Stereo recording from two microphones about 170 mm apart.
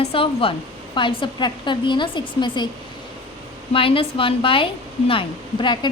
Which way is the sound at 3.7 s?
30° left (ahead or behind).